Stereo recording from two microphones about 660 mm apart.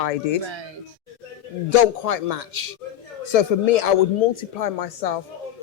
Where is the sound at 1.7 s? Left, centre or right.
Left.